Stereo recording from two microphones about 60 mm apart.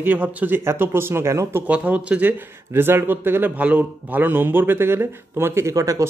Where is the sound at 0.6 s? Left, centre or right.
Right.